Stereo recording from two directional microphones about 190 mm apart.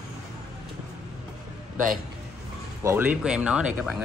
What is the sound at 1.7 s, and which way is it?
Speech, 45° right (ahead or behind).